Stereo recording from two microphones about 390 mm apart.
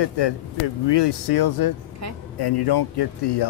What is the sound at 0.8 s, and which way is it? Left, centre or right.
Speech, left.